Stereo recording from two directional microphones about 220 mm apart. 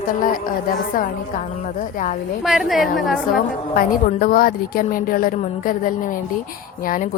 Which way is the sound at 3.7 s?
40° left (ahead or behind).